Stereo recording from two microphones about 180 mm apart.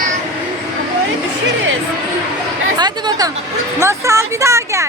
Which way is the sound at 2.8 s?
20° right (ahead or behind).